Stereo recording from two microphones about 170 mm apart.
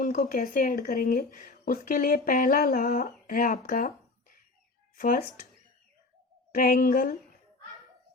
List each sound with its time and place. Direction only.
0.0 s speech: 55° left (ahead or behind)
6.5 s speech: 55° left (ahead or behind)